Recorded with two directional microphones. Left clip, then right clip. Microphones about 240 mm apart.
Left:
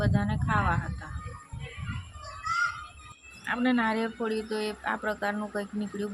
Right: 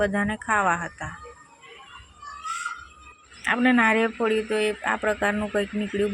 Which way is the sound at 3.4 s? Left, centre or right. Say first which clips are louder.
Right 7 dB; centre.